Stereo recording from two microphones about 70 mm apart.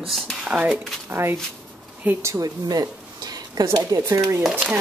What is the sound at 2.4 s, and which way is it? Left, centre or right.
Speech, right.